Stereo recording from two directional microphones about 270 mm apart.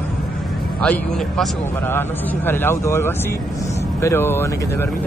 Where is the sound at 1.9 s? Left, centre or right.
Centre.